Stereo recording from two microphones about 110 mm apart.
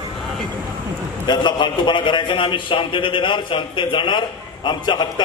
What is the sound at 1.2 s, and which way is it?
A man's voice, 45° left (ahead or behind).